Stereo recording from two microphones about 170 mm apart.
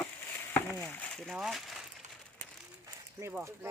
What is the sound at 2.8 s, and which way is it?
Speech, 15° right (ahead or behind).